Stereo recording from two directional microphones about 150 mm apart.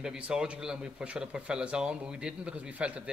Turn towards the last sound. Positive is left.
turn(degrees=-10)  # may be behind; listen again after turning